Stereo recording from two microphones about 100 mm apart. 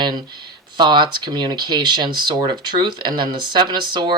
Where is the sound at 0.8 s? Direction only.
50° right (ahead or behind).